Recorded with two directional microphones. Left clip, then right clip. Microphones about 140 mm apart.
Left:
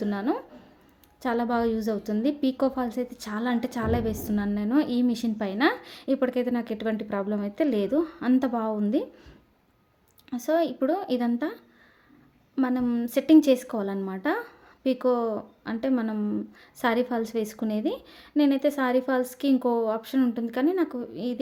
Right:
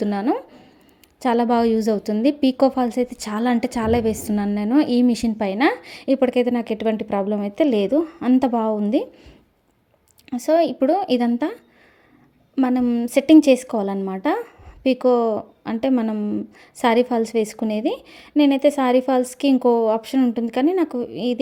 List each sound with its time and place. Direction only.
0.0 s a woman's voice: 45° right (ahead or behind)
12.8 s speech: 30° right (ahead or behind)